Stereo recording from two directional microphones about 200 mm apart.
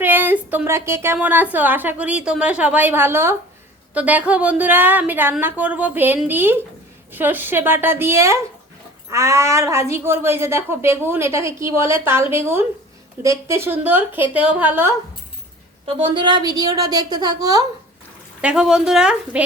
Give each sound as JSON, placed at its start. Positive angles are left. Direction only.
{"t": 0.0, "sound": "a woman's voice", "side_deg": -10}
{"t": 16.0, "sound": "a woman's voice", "side_deg": -25}
{"t": 18.4, "sound": "speech", "side_deg": -5}